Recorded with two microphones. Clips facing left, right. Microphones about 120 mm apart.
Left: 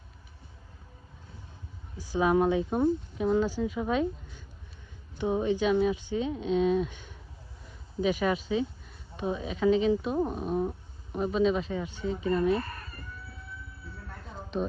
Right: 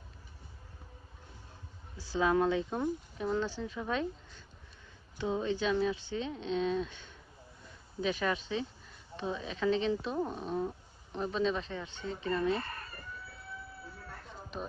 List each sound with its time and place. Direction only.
2.0 s speech: 15° left (ahead or behind)
5.1 s speech: 20° left (ahead or behind)
12.5 s speech: 25° right (ahead or behind)